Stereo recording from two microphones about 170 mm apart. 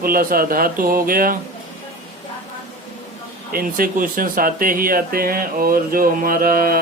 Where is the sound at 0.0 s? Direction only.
60° right (ahead or behind).